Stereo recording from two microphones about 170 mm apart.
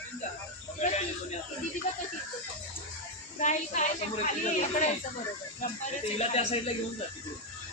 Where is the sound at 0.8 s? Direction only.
40° left (ahead or behind).